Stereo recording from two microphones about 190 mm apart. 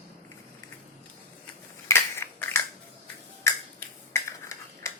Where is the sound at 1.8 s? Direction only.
15° left (ahead or behind).